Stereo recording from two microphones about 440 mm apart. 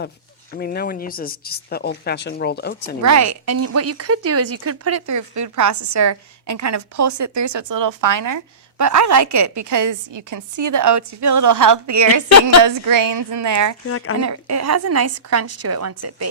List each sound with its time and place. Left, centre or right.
0.5 s speech: left
3.0 s a woman's voice: right
12.3 s a woman's voice: left
12.6 s a woman's voice: right
13.8 s speech: left
14.2 s a woman's voice: right